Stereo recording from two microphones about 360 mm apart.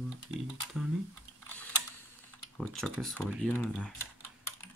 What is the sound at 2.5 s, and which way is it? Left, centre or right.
Speech, centre.